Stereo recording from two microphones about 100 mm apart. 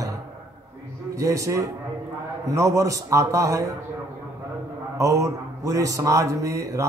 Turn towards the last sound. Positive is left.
turn(degrees=-35)  # may be behind; listen again after turning